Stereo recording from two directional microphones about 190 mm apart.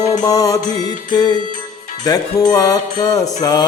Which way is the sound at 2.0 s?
20° left (ahead or behind).